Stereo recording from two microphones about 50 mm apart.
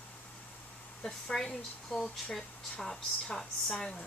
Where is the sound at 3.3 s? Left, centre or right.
Centre.